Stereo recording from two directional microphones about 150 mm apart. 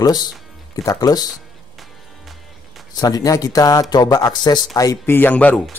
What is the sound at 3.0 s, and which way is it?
Speech, 25° left (ahead or behind).